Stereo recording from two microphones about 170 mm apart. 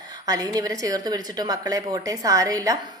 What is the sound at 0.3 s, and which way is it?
A woman's voice, 20° right (ahead or behind).